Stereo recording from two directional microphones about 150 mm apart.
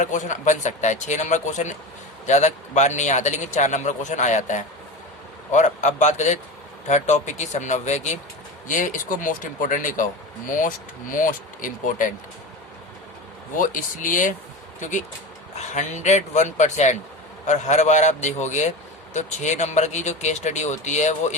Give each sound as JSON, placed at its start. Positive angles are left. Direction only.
{"t": 0.0, "sound": "a man's voice", "side_deg": 55}
{"t": 13.6, "sound": "a man's voice", "side_deg": 60}